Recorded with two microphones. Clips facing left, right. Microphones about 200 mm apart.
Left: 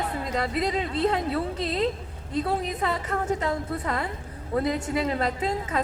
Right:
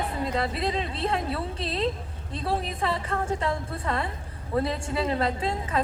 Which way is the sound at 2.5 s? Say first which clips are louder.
Right 2 dB; 25° right (ahead or behind).